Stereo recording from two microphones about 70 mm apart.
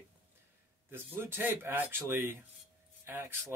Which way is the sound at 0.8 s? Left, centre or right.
Right.